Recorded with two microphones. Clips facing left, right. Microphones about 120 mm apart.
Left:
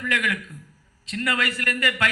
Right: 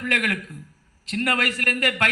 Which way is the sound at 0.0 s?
50° right (ahead or behind).